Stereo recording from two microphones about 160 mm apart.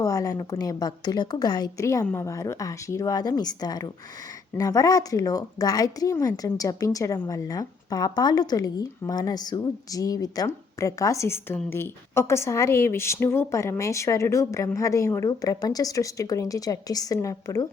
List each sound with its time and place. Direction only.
0.0 s a woman's voice: 20° left (ahead or behind)